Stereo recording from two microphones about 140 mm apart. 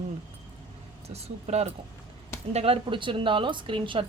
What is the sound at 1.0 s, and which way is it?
A woman's voice, 50° right (ahead or behind).